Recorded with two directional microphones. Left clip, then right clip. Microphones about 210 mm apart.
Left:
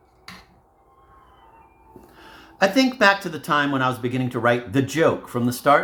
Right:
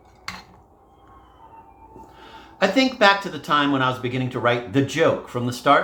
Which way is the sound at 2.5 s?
40° left (ahead or behind).